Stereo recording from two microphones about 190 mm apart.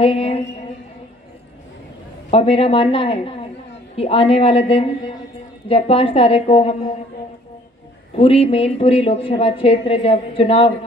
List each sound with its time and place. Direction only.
0.0 s a woman's voice: 30° left (ahead or behind)
2.3 s a woman's voice: 30° left (ahead or behind)
8.2 s a woman's voice: 30° left (ahead or behind)